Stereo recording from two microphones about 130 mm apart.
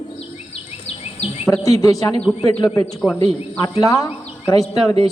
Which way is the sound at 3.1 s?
20° left (ahead or behind).